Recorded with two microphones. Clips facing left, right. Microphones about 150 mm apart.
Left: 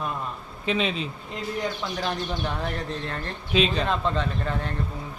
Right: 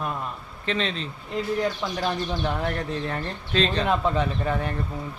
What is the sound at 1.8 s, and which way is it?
A man's voice, 5° right (ahead or behind).